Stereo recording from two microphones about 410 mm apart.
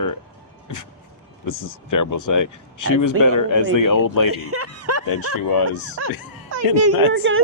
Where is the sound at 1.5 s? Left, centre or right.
Left.